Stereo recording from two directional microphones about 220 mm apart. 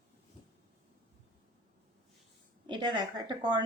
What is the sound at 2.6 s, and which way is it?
A woman's voice, 20° right (ahead or behind).